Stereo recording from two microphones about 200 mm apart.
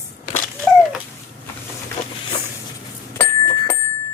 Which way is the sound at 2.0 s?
35° left (ahead or behind).